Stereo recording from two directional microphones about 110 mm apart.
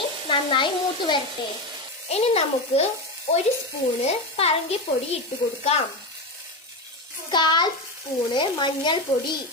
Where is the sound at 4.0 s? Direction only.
65° left (ahead or behind).